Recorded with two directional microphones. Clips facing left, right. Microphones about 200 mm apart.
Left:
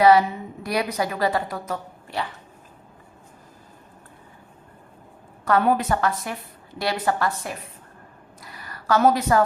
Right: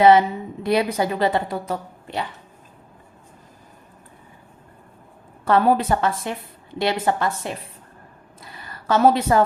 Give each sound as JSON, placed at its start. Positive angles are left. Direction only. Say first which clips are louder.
{"t": 0.0, "sound": "a woman's voice", "louder": "right 2 dB", "side_deg": -25}
{"t": 5.5, "sound": "a woman's voice", "louder": "right 2 dB", "side_deg": -30}
{"t": 8.4, "sound": "a sound", "louder": "right 1 dB", "side_deg": -25}